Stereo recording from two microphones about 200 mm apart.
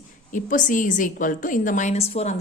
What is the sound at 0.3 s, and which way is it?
A woman's voice, 40° left (ahead or behind).